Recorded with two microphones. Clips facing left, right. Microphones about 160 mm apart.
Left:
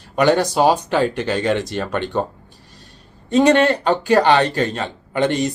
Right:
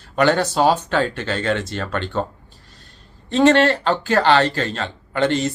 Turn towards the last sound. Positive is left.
turn(degrees=15)  # may be behind; listen again after turning